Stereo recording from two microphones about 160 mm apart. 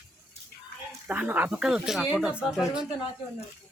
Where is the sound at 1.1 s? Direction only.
10° right (ahead or behind).